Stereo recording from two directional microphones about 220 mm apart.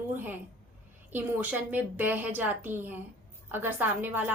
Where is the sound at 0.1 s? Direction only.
10° right (ahead or behind).